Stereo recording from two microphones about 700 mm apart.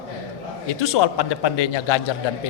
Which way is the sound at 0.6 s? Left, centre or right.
Left.